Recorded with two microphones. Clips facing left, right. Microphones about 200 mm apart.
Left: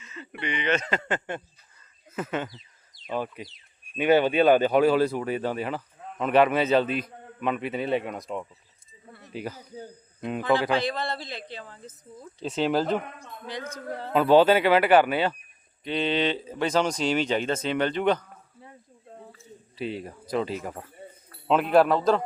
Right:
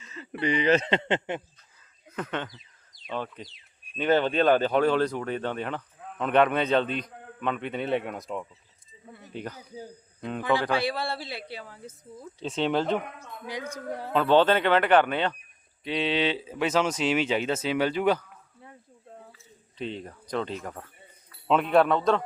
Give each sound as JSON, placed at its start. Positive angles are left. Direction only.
{"t": 0.0, "sound": "speech", "side_deg": -35}
{"t": 1.8, "sound": "a sound", "side_deg": 5}
{"t": 3.1, "sound": "speech", "side_deg": 10}
{"t": 9.6, "sound": "speech", "side_deg": -5}
{"t": 10.2, "sound": "speech", "side_deg": 10}
{"t": 10.7, "sound": "speech", "side_deg": -10}
{"t": 12.4, "sound": "speech", "side_deg": 5}
{"t": 13.4, "sound": "speech", "side_deg": -10}
{"t": 14.1, "sound": "speech", "side_deg": 10}
{"t": 19.7, "sound": "speech", "side_deg": 5}